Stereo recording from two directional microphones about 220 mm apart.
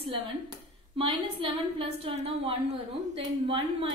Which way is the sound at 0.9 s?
25° right (ahead or behind).